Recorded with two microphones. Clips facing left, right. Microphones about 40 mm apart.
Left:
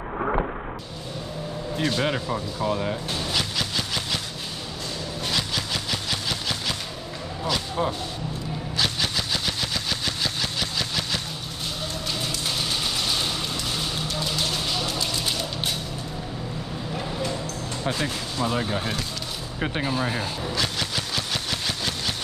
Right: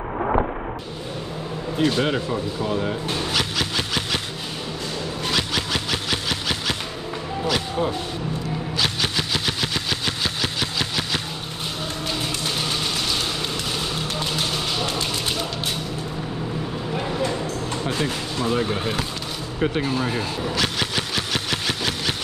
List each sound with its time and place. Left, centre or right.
1.8 s speech: centre
2.2 s speech: centre
2.7 s speech: centre
3.1 s vehicle: right
5.3 s vehicle: right
8.7 s vehicle: right
17.8 s speech: right
18.4 s speech: centre
19.6 s speech: centre
20.5 s vehicle: right
21.1 s engine: right